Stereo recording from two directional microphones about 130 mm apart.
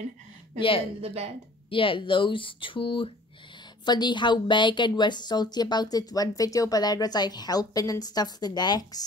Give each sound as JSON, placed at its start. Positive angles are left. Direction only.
{"t": 0.6, "sound": "speech", "side_deg": 45}
{"t": 1.0, "sound": "speech", "side_deg": -55}
{"t": 1.7, "sound": "a woman's voice", "side_deg": 40}